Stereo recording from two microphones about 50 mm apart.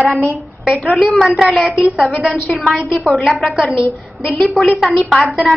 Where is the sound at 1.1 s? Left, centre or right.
Centre.